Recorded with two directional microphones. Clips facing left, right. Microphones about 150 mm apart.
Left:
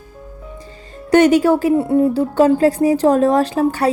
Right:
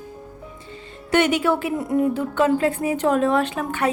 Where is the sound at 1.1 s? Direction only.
40° left (ahead or behind).